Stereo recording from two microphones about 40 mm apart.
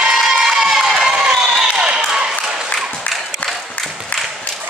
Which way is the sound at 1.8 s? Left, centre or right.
Right.